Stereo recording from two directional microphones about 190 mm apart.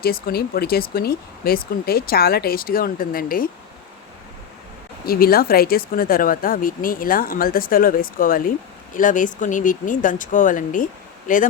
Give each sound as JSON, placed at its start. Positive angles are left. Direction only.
{"t": 0.0, "sound": "speech", "side_deg": 55}
{"t": 5.0, "sound": "speech", "side_deg": 50}